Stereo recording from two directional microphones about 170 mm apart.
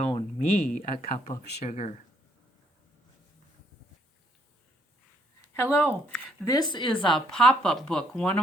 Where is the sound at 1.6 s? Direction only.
40° left (ahead or behind).